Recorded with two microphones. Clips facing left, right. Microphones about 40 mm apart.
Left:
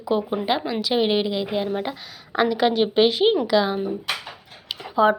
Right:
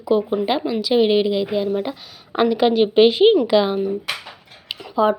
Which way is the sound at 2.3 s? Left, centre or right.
Centre.